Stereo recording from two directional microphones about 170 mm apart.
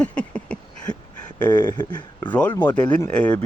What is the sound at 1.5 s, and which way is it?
Speech, 25° left (ahead or behind).